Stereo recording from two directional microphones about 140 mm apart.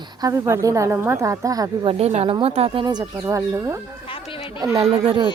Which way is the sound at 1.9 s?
50° right (ahead or behind).